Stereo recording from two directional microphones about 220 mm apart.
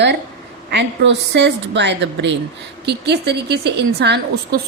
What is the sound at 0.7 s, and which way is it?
A woman's voice, 50° right (ahead or behind).